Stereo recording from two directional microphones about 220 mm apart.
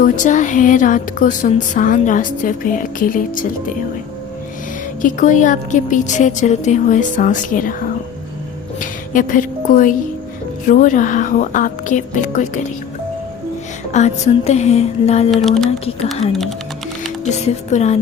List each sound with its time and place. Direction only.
0.0 s speech: 35° left (ahead or behind)
5.0 s a woman's voice: 35° left (ahead or behind)
13.9 s speech: 30° left (ahead or behind)
15.3 s speech: centre (ahead or behind)
17.3 s speech: 30° left (ahead or behind)